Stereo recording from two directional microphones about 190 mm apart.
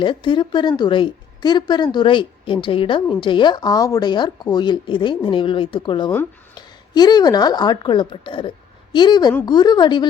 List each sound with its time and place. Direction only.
0.0 s a woman's voice: 25° left (ahead or behind)